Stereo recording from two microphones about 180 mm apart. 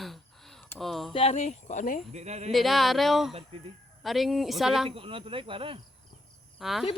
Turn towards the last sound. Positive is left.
turn(degrees=0)  # may be behind; listen again after turning